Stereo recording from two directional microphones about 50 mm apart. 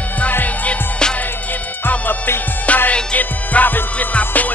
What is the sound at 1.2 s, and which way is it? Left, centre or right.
Music, left.